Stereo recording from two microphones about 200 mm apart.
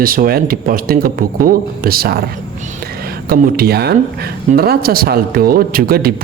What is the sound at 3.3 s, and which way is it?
Speech, 50° right (ahead or behind).